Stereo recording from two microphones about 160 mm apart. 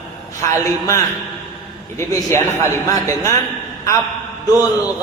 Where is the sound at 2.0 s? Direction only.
15° left (ahead or behind).